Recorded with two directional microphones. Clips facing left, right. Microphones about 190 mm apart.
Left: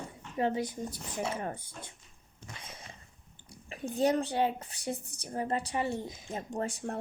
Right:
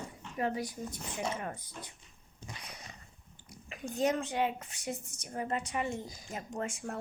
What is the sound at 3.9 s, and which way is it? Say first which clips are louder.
A woman's voice: left 3 dB; 35° left (ahead or behind).